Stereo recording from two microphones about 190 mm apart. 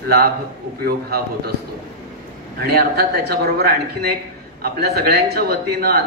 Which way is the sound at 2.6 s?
55° right (ahead or behind).